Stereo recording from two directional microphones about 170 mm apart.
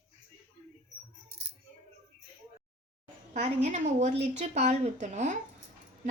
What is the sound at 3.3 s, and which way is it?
A woman's voice, 40° right (ahead or behind).